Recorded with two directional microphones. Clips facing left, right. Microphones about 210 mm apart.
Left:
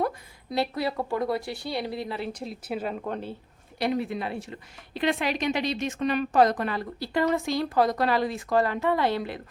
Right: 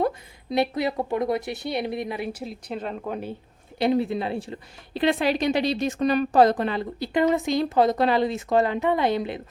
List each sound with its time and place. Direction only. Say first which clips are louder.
0.5 s a woman's voice: right 4 dB; 20° right (ahead or behind)
2.4 s speech: even; 5° left (ahead or behind)
3.8 s a woman's voice: right 5 dB; 25° right (ahead or behind)